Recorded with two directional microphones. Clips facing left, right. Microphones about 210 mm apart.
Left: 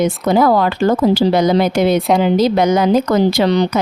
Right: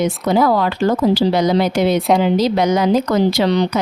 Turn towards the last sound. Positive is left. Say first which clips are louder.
# left 2 dB
turn(degrees=50)  # may be behind; listen again after turning